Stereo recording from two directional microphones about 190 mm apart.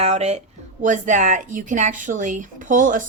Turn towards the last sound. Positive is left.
turn(degrees=-45)  # may be behind; listen again after turning